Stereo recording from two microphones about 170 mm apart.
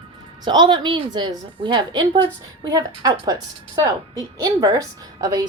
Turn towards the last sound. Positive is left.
turn(degrees=-25)  # may be behind; listen again after turning